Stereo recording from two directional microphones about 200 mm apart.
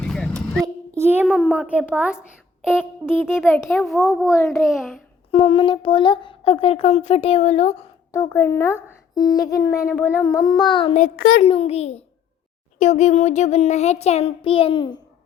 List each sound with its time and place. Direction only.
0.0 s a sound: 5° left (ahead or behind)
0.9 s a child's voice: 10° right (ahead or behind)
3.1 s speech: 10° left (ahead or behind)
3.8 s speech: centre (ahead or behind)
4.3 s speech: 15° left (ahead or behind)
4.7 s speech: centre (ahead or behind)
5.3 s speech: 25° left (ahead or behind)
8.1 s speech: 15° left (ahead or behind)
11.4 s child singing: 30° left (ahead or behind)